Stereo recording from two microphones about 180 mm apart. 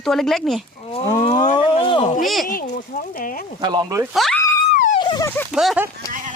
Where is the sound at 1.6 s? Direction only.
30° left (ahead or behind).